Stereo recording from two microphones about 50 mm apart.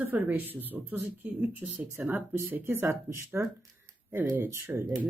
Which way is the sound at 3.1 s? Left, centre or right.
Right.